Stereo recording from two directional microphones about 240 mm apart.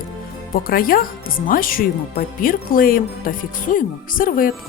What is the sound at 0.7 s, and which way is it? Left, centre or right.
Speech, left.